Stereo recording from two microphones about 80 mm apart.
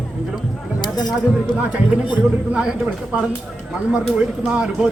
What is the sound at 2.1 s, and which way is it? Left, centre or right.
Speech, centre.